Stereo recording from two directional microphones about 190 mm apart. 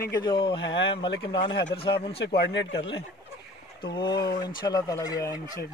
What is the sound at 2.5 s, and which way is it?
Speech, 75° left (ahead or behind).